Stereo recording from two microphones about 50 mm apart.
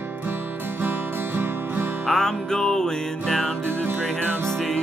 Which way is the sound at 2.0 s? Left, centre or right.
Centre.